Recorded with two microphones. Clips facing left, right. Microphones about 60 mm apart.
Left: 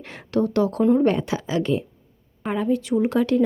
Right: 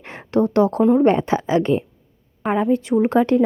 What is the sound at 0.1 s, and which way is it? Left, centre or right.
A woman's voice, right.